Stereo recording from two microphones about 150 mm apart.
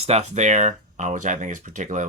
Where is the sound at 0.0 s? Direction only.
45° right (ahead or behind).